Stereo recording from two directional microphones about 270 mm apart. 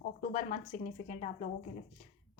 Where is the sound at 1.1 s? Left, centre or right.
Left.